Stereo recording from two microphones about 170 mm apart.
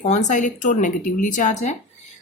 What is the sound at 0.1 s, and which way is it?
A woman's voice, 45° left (ahead or behind).